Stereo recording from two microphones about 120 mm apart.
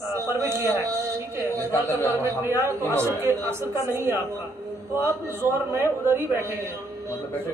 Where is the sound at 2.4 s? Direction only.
20° right (ahead or behind).